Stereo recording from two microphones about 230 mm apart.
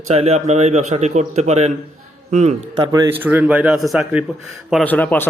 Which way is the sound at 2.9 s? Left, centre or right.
Centre.